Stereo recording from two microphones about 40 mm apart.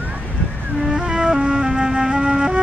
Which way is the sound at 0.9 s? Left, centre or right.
Right.